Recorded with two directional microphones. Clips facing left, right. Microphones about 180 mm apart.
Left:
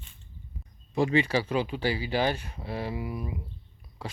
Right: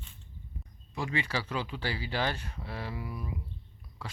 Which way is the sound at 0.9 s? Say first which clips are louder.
Left 9 dB; 25° left (ahead or behind).